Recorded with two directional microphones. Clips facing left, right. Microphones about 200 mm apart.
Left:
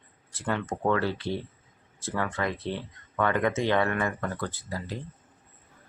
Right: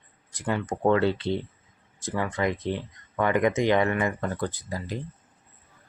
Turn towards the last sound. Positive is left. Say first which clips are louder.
# right 2 dB
turn(degrees=-15)  # may be behind; listen again after turning